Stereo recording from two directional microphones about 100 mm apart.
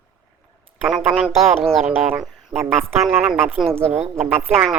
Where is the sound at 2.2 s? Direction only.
Centre (ahead or behind).